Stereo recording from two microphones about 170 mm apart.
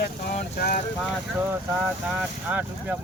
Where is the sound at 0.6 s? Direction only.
70° left (ahead or behind).